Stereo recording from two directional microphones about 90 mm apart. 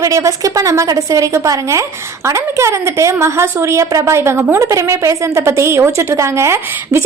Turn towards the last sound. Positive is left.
turn(degrees=-30)  # may be behind; listen again after turning